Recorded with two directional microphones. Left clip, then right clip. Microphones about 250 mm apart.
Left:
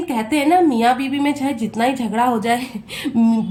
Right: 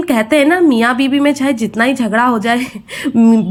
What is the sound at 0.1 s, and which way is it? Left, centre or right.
A woman's voice, centre.